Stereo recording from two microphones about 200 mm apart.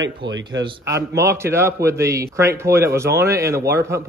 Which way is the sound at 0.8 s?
15° right (ahead or behind).